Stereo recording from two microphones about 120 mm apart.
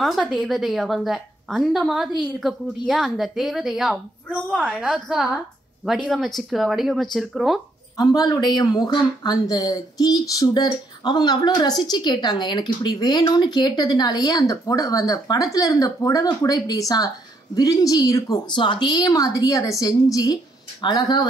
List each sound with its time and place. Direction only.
0.0 s a woman's voice: centre (ahead or behind)
8.0 s speech: 35° left (ahead or behind)
18.6 s speech: 40° left (ahead or behind)